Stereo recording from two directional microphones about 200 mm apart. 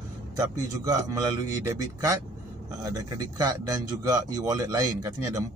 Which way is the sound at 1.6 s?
15° right (ahead or behind).